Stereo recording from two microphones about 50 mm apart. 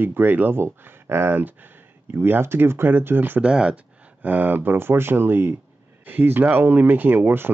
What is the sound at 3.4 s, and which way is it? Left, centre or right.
Speech, centre.